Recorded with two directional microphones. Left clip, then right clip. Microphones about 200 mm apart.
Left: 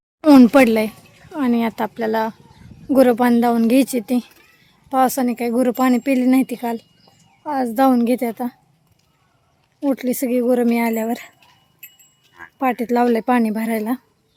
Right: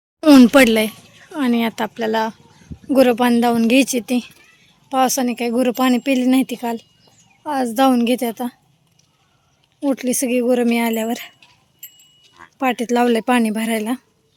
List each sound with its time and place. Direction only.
0.2 s speech: centre (ahead or behind)
9.8 s speech: centre (ahead or behind)
12.2 s keys jangling: 10° right (ahead or behind)
12.5 s speech: centre (ahead or behind)